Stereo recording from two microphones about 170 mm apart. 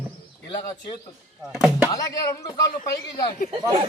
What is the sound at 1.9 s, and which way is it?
Speech, 20° left (ahead or behind).